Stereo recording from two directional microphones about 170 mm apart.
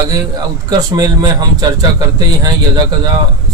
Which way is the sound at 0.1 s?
25° right (ahead or behind).